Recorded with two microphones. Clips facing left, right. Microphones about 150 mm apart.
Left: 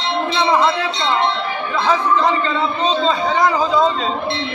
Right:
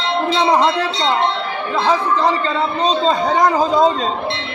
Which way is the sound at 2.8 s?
45° right (ahead or behind).